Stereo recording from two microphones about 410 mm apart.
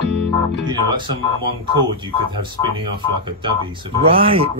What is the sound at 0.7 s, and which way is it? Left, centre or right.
Speech, centre.